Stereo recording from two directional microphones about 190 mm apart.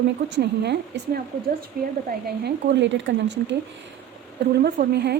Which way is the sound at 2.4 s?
70° right (ahead or behind).